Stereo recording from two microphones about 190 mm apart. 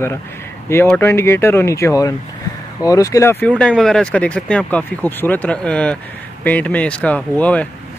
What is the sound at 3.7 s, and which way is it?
Speech, centre (ahead or behind).